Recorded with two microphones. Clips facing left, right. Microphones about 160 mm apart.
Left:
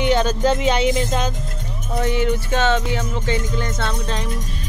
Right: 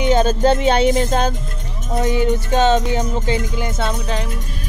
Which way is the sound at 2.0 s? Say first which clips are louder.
Right 2 dB; 15° right (ahead or behind).